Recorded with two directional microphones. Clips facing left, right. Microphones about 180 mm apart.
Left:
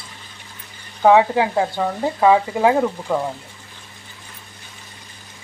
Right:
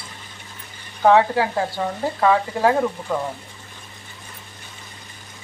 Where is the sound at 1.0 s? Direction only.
15° left (ahead or behind).